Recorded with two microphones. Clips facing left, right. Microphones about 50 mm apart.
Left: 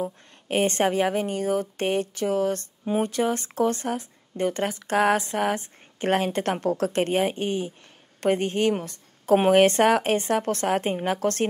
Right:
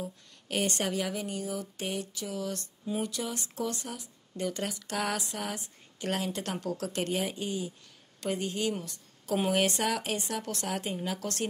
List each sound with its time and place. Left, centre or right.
0.0 s a woman's voice: left